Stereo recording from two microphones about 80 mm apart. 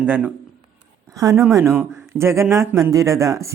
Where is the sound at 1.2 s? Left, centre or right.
Right.